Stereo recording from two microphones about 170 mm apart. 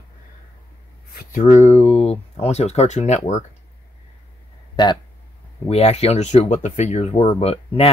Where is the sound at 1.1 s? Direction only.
55° left (ahead or behind).